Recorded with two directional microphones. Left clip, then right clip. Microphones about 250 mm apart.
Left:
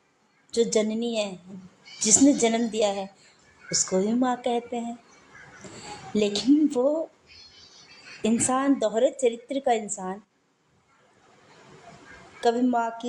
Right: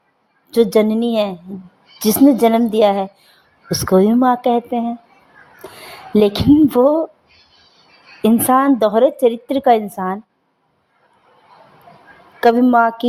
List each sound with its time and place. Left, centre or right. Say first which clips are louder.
0.5 s a woman's voice: right 10 dB; right
6.1 s a woman's voice: right 10 dB; right
8.2 s a woman's voice: right 11 dB; right
12.4 s a woman's voice: right 12 dB; right